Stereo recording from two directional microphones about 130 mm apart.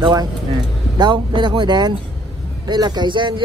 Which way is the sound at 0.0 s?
30° right (ahead or behind).